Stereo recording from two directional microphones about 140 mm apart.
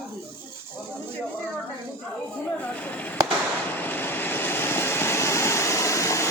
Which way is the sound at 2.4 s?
10° left (ahead or behind).